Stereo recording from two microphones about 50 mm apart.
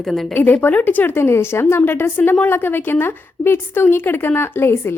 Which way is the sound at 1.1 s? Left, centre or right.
Left.